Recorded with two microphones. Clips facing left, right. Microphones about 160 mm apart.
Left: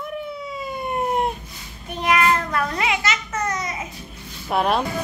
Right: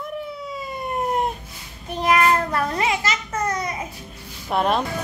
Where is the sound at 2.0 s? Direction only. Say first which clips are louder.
Right 1 dB; 35° right (ahead or behind).